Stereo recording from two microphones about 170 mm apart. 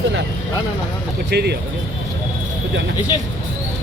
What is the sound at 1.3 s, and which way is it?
Speech, 75° right (ahead or behind).